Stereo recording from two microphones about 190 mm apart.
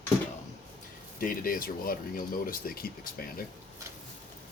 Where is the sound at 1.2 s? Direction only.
50° left (ahead or behind).